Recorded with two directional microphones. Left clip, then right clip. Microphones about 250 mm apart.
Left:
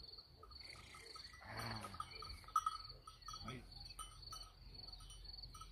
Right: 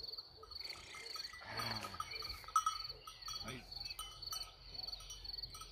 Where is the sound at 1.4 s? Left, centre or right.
Centre.